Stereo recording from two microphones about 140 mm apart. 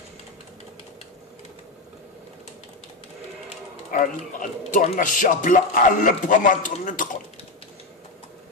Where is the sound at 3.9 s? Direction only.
70° left (ahead or behind).